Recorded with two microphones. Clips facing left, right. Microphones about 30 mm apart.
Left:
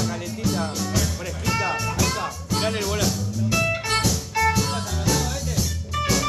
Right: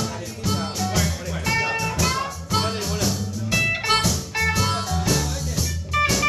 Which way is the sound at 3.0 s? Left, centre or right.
Centre.